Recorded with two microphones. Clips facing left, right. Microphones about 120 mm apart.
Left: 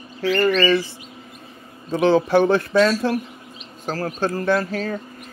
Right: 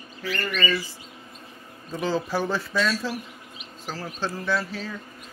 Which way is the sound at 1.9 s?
70° left (ahead or behind).